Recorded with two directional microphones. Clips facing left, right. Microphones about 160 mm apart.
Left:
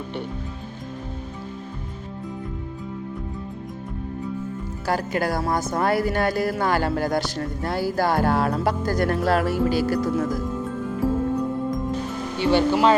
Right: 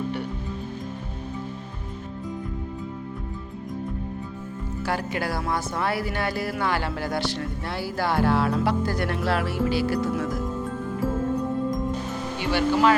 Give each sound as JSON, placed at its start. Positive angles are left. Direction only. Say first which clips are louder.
{"t": 4.9, "sound": "speech", "louder": "left 4 dB", "side_deg": 40}
{"t": 12.4, "sound": "speech", "louder": "left 3 dB", "side_deg": 25}